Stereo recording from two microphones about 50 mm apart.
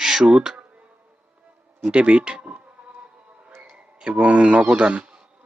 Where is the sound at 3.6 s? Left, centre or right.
Right.